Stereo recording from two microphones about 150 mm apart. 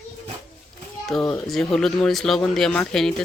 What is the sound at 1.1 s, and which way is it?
A woman's voice, 5° left (ahead or behind).